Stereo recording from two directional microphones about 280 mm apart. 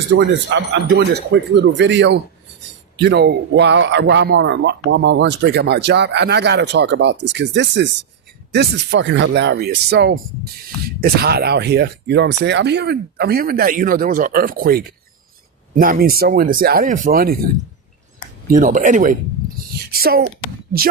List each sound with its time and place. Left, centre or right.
0.2 s a man's voice: right
18.5 s speech: right
19.7 s a sound: right